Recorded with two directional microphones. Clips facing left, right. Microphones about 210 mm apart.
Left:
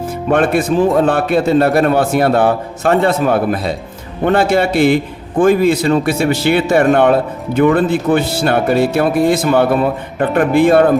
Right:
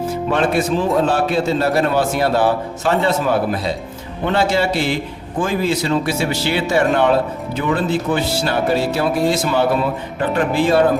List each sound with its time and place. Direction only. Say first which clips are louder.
0.3 s speech: left 5 dB; 55° left (ahead or behind)